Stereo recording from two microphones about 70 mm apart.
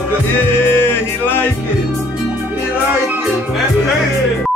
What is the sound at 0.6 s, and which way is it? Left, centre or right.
Music, left.